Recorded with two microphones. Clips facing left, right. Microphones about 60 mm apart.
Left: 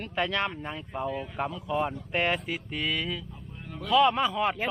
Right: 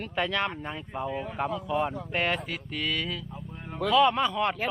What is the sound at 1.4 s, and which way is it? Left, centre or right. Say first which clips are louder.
Speech: right 2 dB; centre.